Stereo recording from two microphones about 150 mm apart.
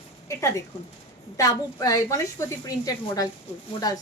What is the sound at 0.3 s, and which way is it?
A woman's voice, 20° left (ahead or behind).